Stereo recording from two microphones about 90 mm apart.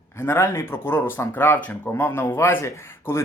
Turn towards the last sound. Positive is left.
turn(degrees=30)  # may be behind; listen again after turning